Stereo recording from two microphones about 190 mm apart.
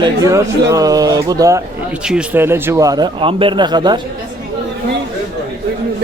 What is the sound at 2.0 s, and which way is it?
Speech, 5° right (ahead or behind).